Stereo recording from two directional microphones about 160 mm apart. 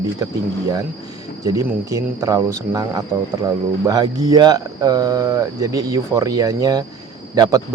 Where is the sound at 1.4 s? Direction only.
20° right (ahead or behind).